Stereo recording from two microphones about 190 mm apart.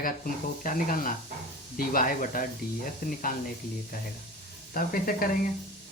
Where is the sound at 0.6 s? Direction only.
45° left (ahead or behind).